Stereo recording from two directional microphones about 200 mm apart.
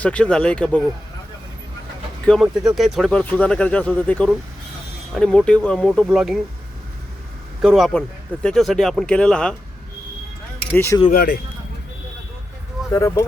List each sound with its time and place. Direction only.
0.0 s speech: 5° left (ahead or behind)
2.2 s speech: centre (ahead or behind)
7.6 s speech: centre (ahead or behind)
10.7 s speech: 10° left (ahead or behind)
11.1 s speech: 50° left (ahead or behind)
12.9 s speech: 15° left (ahead or behind)